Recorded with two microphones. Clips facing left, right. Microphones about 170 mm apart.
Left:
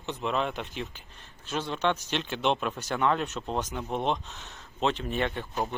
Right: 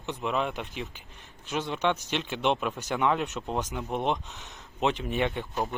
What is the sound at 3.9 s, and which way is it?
Speech, 15° right (ahead or behind).